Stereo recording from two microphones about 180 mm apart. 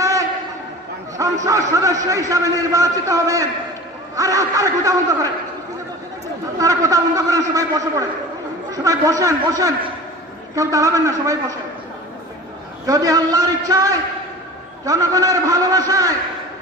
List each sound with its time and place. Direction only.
1.1 s a man's voice: 15° right (ahead or behind)
6.6 s speech: 20° right (ahead or behind)
12.8 s speech: 20° right (ahead or behind)